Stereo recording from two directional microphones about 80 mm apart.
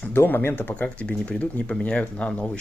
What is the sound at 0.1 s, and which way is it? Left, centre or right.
Speech, left.